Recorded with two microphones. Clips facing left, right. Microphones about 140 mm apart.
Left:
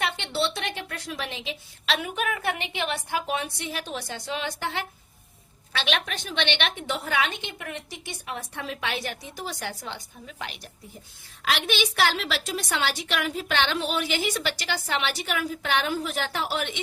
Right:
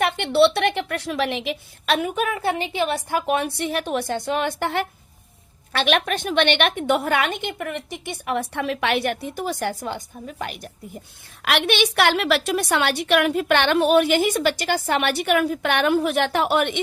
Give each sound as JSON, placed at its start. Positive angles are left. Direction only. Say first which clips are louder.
{"t": 0.0, "sound": "a woman's voice", "louder": "right 10 dB", "side_deg": -60}
{"t": 2.0, "sound": "a woman's voice", "louder": "right 6 dB", "side_deg": -40}
{"t": 11.4, "sound": "a woman's voice", "louder": "right 5 dB", "side_deg": -65}